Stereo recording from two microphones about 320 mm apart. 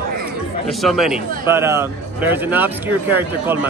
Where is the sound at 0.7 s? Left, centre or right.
Centre.